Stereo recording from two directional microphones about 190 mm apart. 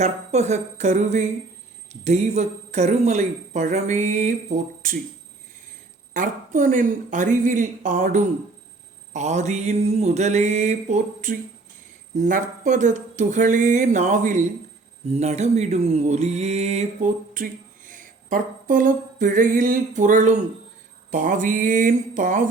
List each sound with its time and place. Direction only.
0.0 s mantra: 35° right (ahead or behind)
6.1 s mantra: 40° right (ahead or behind)
21.1 s speech: 45° right (ahead or behind)